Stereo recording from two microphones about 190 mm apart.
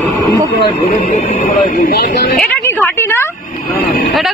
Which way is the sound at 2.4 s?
10° left (ahead or behind).